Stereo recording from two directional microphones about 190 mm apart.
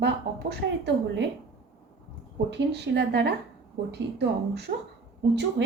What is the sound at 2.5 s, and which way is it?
A woman's voice, 65° right (ahead or behind).